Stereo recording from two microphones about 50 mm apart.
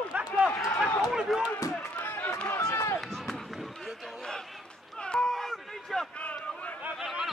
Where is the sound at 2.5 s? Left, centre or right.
Left.